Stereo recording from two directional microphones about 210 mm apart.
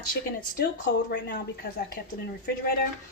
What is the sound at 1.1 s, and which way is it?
Speech, 50° left (ahead or behind).